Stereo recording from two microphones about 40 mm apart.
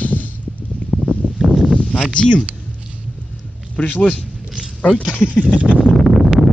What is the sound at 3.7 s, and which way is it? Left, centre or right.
A man's voice, left.